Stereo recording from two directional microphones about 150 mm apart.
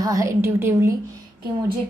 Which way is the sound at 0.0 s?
20° right (ahead or behind).